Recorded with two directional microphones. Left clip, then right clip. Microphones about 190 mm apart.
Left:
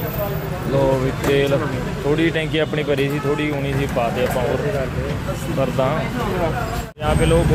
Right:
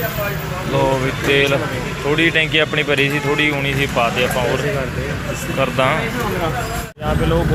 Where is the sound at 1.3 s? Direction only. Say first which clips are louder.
Right 3 dB; 20° left (ahead or behind).